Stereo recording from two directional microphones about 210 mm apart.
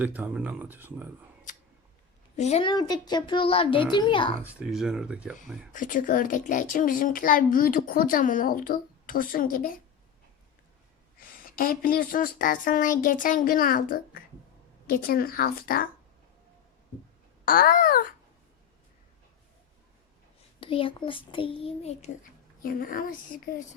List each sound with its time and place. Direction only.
0.0 s speech: 5° right (ahead or behind)
2.3 s a child's voice: 30° left (ahead or behind)
4.4 s speech: 5° right (ahead or behind)
5.7 s speech: 40° left (ahead or behind)
11.2 s speech: 45° left (ahead or behind)
17.4 s speech: 45° left (ahead or behind)
20.6 s a child's voice: 25° left (ahead or behind); by 23.6 s 40° left (ahead or behind)